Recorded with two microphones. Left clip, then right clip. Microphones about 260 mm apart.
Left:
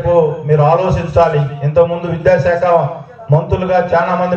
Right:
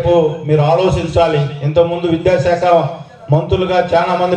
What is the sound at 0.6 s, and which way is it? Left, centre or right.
Speech, right.